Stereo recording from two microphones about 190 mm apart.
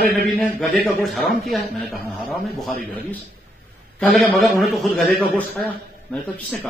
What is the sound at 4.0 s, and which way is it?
A man's voice, 5° left (ahead or behind).